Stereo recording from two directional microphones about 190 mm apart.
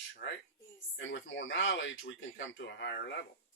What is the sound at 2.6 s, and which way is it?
Speech, 60° left (ahead or behind).